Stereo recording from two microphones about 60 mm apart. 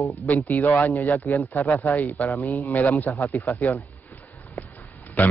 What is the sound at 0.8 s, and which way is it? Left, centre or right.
Speech, left.